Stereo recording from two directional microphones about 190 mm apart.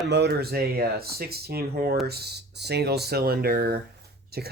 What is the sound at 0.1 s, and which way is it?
Speech, 60° right (ahead or behind).